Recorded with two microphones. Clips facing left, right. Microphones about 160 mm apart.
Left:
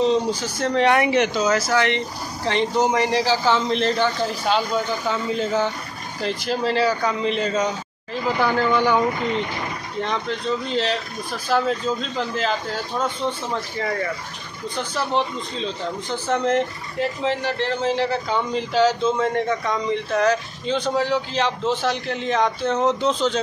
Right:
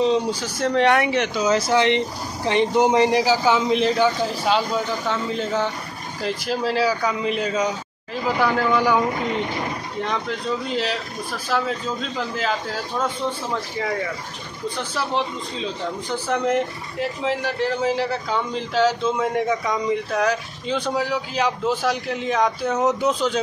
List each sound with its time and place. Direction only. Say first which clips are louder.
0.4 s a man's voice: right 1 dB; 5° right (ahead or behind)
1.7 s a man's voice: right 2 dB; 20° right (ahead or behind); by 9.0 s 5° right (ahead or behind)
10.0 s a man's voice: left 1 dB; 5° right (ahead or behind)
15.0 s a man's voice: left 2 dB; 5° right (ahead or behind)